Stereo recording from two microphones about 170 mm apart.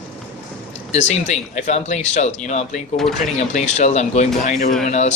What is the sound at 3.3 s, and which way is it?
Speech, 45° left (ahead or behind).